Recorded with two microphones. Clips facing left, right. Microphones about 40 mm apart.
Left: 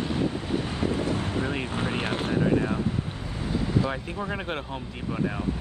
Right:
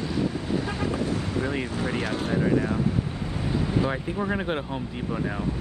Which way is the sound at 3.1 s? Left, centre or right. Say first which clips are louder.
Right 2 dB; right.